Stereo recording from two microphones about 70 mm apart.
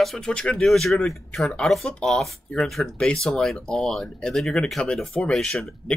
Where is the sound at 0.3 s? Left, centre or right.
Centre.